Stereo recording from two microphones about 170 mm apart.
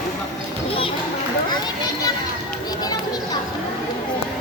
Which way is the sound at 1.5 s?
20° left (ahead or behind).